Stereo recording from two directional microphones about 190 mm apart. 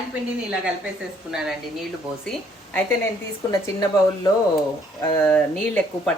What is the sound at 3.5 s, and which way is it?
Speech, 20° left (ahead or behind).